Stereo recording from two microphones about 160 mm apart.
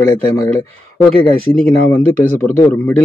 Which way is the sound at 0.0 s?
20° left (ahead or behind).